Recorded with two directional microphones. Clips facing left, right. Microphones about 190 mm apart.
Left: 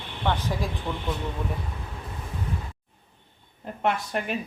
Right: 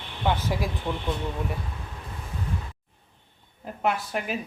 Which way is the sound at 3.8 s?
5° right (ahead or behind).